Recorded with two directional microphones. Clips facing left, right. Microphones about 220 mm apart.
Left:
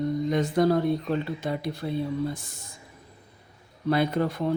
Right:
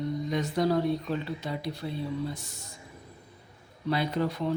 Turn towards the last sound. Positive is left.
turn(degrees=50)  # may be behind; listen again after turning